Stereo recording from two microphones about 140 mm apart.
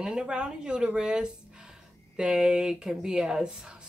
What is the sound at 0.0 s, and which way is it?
Speech, 5° right (ahead or behind).